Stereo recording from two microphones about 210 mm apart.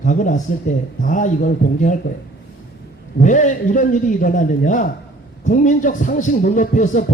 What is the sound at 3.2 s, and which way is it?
A man's voice, 35° left (ahead or behind).